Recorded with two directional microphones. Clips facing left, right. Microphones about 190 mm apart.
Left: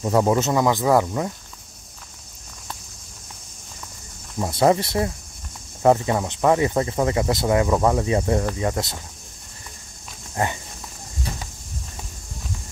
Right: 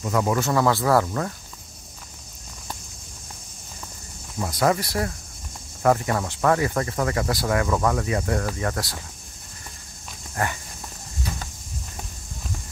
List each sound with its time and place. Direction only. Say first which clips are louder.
0.0 s speech: left 4 dB; 30° left (ahead or behind)
4.4 s speech: left 4 dB; 25° left (ahead or behind)
10.3 s speech: left 3 dB; 20° left (ahead or behind)